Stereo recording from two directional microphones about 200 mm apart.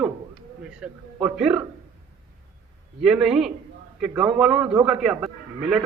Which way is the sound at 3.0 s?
5° right (ahead or behind).